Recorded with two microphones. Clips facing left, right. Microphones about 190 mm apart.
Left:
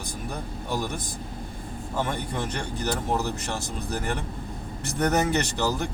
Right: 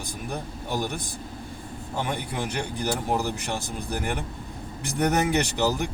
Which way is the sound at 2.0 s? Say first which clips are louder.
Left 1 dB; 10° right (ahead or behind).